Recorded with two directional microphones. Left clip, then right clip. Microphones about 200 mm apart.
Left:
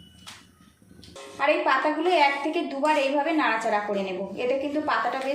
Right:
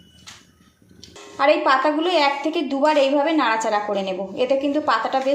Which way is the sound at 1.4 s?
35° right (ahead or behind).